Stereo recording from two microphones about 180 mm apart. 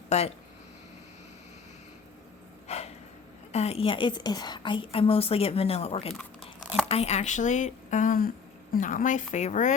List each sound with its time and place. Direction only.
0.1 s speech: 35° left (ahead or behind)
2.6 s a sound: 35° left (ahead or behind)
3.5 s a woman's voice: 35° left (ahead or behind)